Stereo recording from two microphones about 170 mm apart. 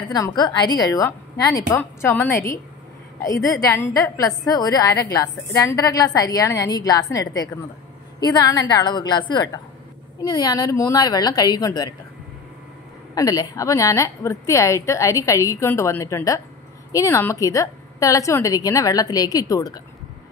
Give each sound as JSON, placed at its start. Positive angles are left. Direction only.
{"t": 0.1, "sound": "a woman's voice", "side_deg": 25}
{"t": 13.1, "sound": "a woman's voice", "side_deg": 20}